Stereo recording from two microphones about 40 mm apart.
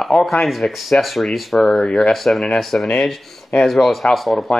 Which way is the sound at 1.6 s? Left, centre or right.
Centre.